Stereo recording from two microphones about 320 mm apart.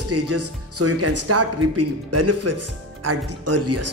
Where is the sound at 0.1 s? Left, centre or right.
Right.